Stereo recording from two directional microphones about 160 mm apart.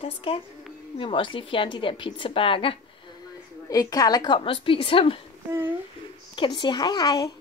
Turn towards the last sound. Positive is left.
turn(degrees=25)  # may be behind; listen again after turning